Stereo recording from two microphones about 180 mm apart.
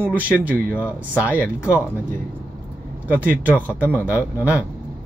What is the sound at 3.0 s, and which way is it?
Speech, 10° right (ahead or behind).